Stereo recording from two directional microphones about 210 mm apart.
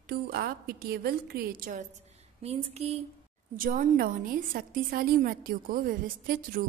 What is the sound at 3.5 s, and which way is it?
A woman's voice, 40° right (ahead or behind).